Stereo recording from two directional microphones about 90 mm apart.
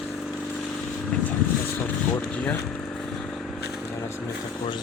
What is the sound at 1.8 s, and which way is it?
Vehicle, 15° left (ahead or behind).